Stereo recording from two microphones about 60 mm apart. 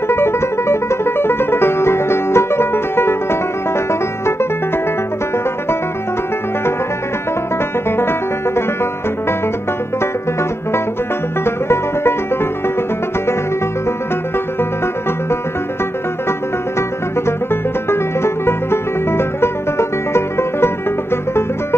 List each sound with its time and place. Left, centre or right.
0.1 s music: left
7.9 s music: left
11.4 s music: left
17.5 s music: left